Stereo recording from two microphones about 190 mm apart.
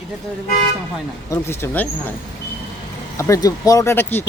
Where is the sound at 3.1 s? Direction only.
15° left (ahead or behind).